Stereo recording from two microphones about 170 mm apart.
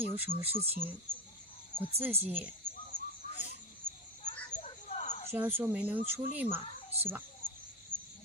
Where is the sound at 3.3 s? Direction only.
40° left (ahead or behind).